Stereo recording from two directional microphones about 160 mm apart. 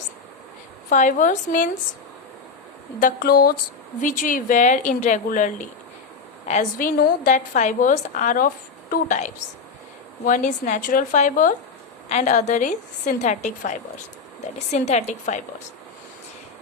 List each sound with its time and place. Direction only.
0.9 s a woman's voice: 50° left (ahead or behind)
3.0 s speech: 75° left (ahead or behind)
4.0 s a woman's voice: 55° left (ahead or behind)